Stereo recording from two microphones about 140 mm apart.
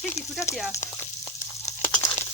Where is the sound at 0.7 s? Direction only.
20° left (ahead or behind).